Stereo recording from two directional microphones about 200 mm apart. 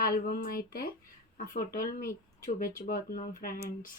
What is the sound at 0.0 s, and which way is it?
Speech, 50° left (ahead or behind).